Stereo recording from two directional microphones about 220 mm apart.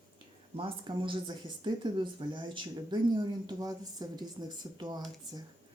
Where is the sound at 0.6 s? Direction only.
20° right (ahead or behind).